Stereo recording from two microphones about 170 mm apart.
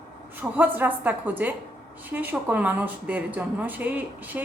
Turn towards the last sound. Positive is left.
turn(degrees=-10)  # may be behind; listen again after turning